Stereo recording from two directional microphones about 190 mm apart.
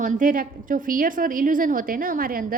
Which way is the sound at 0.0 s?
45° right (ahead or behind).